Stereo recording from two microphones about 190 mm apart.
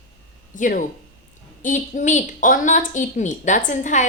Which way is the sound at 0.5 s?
45° left (ahead or behind).